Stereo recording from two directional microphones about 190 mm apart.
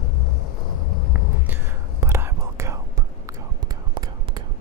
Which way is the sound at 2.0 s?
15° right (ahead or behind).